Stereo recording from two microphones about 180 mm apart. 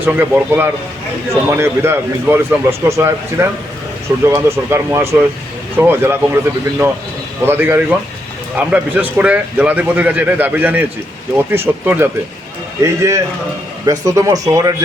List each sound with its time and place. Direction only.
0.0 s a man's voice: 10° right (ahead or behind)